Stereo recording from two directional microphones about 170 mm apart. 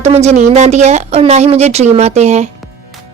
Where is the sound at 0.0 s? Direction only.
40° right (ahead or behind).